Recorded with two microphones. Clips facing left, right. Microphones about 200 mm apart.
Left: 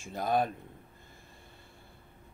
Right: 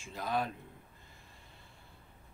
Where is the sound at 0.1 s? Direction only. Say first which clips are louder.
Left 6 dB; 50° left (ahead or behind).